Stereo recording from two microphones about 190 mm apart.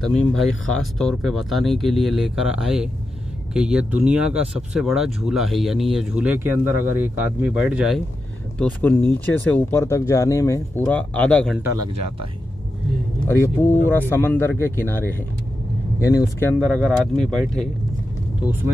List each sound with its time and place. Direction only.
0.0 s speech: 5° left (ahead or behind)
8.5 s speech: 10° left (ahead or behind)
13.3 s speech: 10° left (ahead or behind)
16.5 s speech: 5° left (ahead or behind)